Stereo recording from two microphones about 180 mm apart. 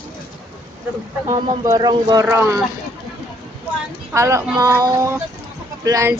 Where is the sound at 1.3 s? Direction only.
20° right (ahead or behind).